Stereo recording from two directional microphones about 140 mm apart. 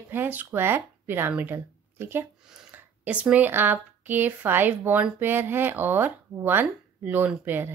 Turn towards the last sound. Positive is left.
turn(degrees=-15)  # may be behind; listen again after turning